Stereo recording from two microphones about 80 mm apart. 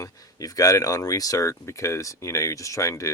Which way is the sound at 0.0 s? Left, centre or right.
Left.